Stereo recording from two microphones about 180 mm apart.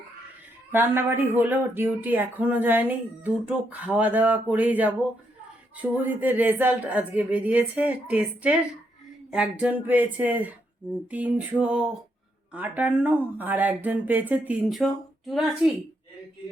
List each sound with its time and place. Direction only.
0.7 s speech: 10° right (ahead or behind)
11.6 s a sound: 5° right (ahead or behind)
12.5 s speech: 10° right (ahead or behind)